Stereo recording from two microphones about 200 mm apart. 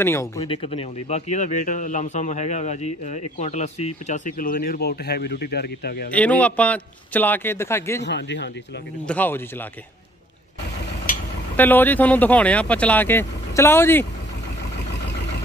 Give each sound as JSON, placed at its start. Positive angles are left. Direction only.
{"t": 0.0, "sound": "speech", "side_deg": 10}
{"t": 0.4, "sound": "a man's voice", "side_deg": 30}
{"t": 6.1, "sound": "speech", "side_deg": 5}
{"t": 8.0, "sound": "speech", "side_deg": 60}
{"t": 9.0, "sound": "speech", "side_deg": 10}
{"t": 11.5, "sound": "speech", "side_deg": 10}